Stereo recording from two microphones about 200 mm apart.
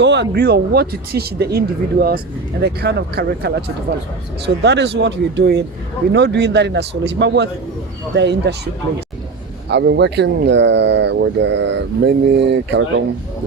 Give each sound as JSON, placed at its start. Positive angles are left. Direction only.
{"t": 0.0, "sound": "speech", "side_deg": -60}